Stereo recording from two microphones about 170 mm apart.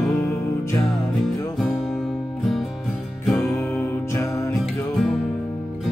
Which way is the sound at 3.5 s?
5° left (ahead or behind).